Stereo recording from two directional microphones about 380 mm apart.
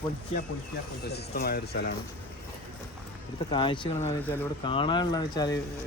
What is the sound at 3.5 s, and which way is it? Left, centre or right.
Speech, centre.